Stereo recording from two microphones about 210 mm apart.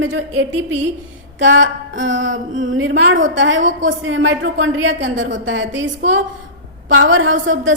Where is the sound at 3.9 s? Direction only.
65° right (ahead or behind).